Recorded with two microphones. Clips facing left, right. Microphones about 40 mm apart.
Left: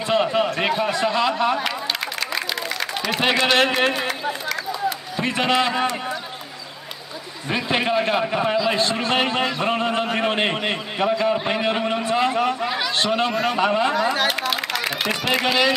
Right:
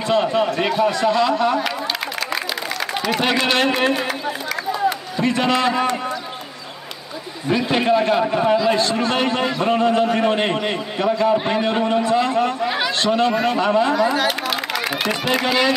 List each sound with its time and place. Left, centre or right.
0.1 s a sound: centre
0.6 s a man's voice: centre
3.2 s a man's voice: centre
5.2 s a man's voice: centre
7.4 s a man's voice: centre
14.2 s a sound: centre